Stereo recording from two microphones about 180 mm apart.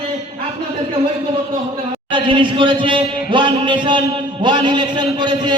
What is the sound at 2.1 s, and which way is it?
A man's voice, 25° right (ahead or behind).